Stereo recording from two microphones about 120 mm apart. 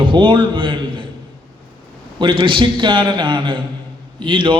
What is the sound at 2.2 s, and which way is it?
A man's voice, 45° right (ahead or behind).